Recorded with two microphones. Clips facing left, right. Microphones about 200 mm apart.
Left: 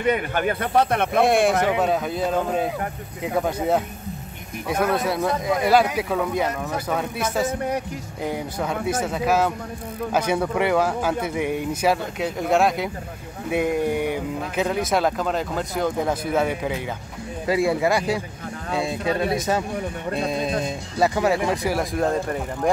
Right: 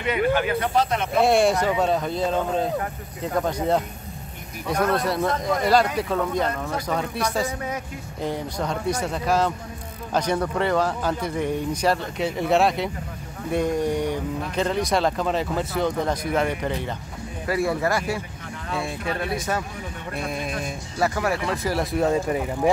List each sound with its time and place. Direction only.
0.0 s speech: 50° left (ahead or behind)
1.2 s speech: centre (ahead or behind); by 21.7 s 15° left (ahead or behind)
21.7 s speech: 5° right (ahead or behind)